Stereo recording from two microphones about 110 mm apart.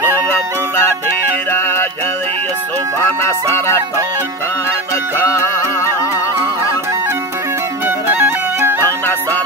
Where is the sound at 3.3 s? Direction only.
25° left (ahead or behind).